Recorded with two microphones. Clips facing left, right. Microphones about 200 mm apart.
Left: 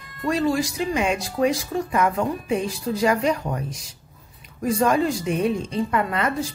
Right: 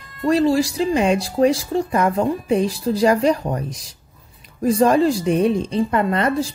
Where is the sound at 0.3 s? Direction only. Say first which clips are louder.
Right 5 dB; 35° right (ahead or behind).